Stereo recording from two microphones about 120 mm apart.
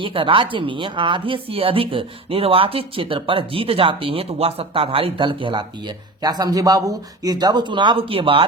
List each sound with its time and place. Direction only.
0.0 s a woman's voice: 50° right (ahead or behind)
6.2 s a man's voice: 30° right (ahead or behind); by 8.4 s 50° right (ahead or behind)